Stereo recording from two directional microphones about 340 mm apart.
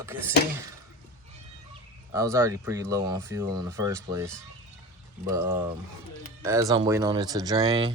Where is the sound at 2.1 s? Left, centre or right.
Centre.